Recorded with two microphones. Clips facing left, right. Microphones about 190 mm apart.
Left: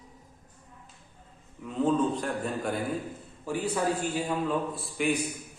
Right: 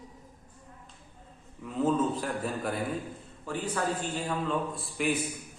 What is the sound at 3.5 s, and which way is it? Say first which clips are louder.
A man's voice: left 3 dB; 10° left (ahead or behind).